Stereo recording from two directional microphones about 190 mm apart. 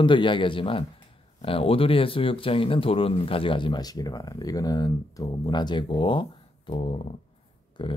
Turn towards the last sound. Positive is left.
turn(degrees=25)  # may be behind; listen again after turning